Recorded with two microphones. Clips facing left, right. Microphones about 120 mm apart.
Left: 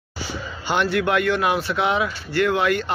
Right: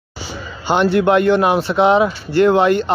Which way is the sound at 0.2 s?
25° right (ahead or behind).